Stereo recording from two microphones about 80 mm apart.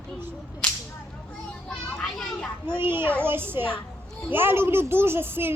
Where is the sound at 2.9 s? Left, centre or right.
Right.